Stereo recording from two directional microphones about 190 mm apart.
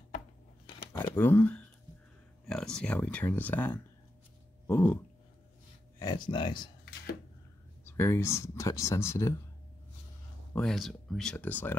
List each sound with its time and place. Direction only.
0.7 s a sound: 25° left (ahead or behind)
1.1 s speech: 10° left (ahead or behind)
4.6 s a sound: 10° left (ahead or behind)
5.9 s speech: 20° left (ahead or behind)
7.8 s speech: 10° left (ahead or behind)
10.5 s speech: 5° left (ahead or behind)